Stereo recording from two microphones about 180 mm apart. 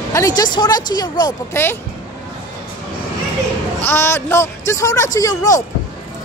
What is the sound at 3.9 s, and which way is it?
A man's voice, 10° left (ahead or behind).